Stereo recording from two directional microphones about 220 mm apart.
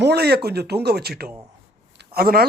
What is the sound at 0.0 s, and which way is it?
Speech, 45° right (ahead or behind).